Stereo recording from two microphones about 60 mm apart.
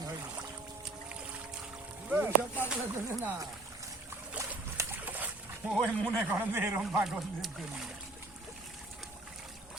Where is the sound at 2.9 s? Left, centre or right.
Right.